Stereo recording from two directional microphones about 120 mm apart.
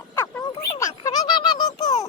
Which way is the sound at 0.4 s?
35° left (ahead or behind).